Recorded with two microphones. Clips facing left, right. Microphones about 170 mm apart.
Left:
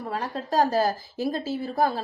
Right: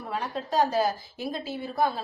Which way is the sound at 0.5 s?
40° left (ahead or behind).